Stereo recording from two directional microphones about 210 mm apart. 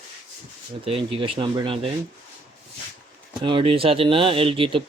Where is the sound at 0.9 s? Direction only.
25° right (ahead or behind).